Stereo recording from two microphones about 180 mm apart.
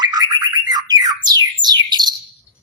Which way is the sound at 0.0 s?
25° right (ahead or behind).